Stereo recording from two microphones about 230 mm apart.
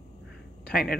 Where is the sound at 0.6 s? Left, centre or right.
Left.